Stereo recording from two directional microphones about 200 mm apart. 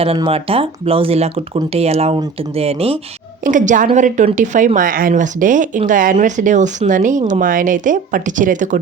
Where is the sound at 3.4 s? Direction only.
40° right (ahead or behind).